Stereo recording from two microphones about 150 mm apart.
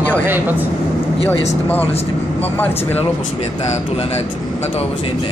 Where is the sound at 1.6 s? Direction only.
10° left (ahead or behind).